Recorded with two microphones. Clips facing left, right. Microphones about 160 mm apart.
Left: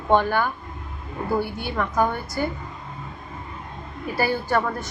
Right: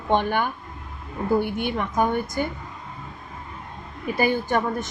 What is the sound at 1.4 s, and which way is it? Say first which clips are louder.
A woman's voice: right 1 dB; 20° right (ahead or behind).